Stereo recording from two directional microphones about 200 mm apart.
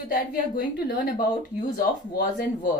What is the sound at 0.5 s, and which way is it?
Speech, 50° left (ahead or behind).